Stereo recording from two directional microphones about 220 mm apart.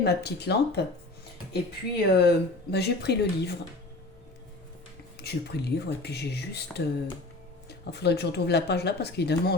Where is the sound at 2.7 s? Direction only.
50° left (ahead or behind).